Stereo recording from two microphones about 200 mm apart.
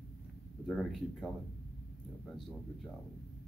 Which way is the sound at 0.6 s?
5° left (ahead or behind).